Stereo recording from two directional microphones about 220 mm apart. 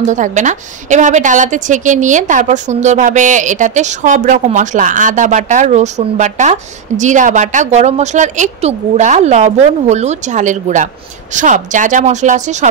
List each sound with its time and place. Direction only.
0.1 s a woman's voice: 35° right (ahead or behind)